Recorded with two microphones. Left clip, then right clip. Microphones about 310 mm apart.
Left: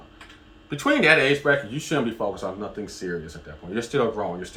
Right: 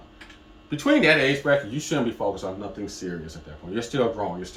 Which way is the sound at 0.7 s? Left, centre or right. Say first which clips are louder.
Left 1 dB; centre.